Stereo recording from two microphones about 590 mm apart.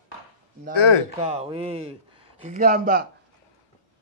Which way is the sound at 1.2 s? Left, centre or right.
Centre.